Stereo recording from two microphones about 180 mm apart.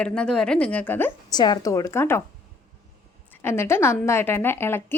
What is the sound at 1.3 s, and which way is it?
Speech, 20° left (ahead or behind).